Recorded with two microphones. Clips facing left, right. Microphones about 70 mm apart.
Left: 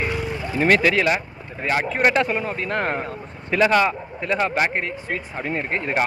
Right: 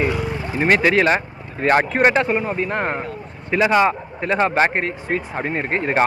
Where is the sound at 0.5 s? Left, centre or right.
Right.